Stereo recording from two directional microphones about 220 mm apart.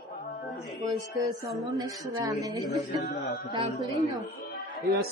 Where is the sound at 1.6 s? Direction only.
15° right (ahead or behind).